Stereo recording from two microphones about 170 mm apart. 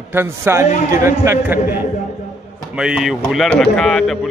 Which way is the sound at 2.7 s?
5° right (ahead or behind).